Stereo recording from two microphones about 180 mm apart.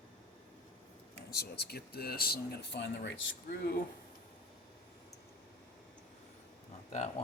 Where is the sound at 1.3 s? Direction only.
65° left (ahead or behind); by 3.3 s 85° left.